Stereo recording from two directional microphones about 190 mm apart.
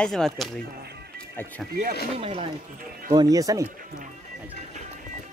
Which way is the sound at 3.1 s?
20° right (ahead or behind).